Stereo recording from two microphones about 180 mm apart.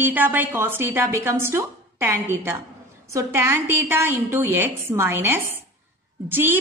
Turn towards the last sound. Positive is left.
turn(degrees=-10)  # may be behind; listen again after turning